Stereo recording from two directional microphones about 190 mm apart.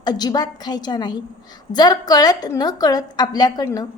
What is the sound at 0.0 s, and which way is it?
A woman's voice, 20° left (ahead or behind).